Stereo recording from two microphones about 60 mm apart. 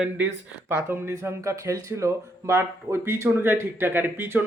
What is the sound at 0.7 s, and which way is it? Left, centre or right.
Speech, right.